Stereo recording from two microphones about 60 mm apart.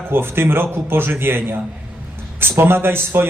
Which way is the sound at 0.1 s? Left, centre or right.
Right.